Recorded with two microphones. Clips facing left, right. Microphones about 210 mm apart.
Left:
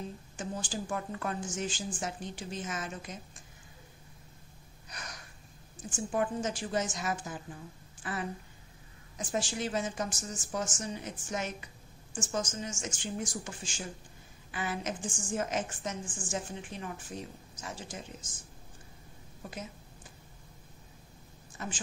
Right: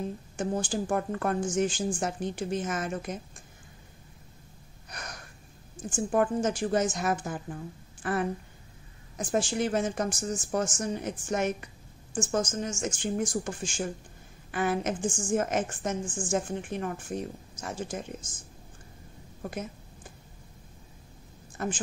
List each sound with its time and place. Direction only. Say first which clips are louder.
0.4 s a woman's voice: right 8 dB; 50° right (ahead or behind)
4.8 s gasp: right 4 dB; 55° right (ahead or behind)
5.9 s a woman's voice: right 6 dB; 50° right (ahead or behind)
8.0 s a sound: right 8 dB; 55° right (ahead or behind)
9.2 s a woman's voice: right 6 dB; 55° right (ahead or behind)
19.4 s a woman's voice: right 7 dB; 55° right (ahead or behind)
21.5 s a woman's voice: right 8 dB; 50° right (ahead or behind)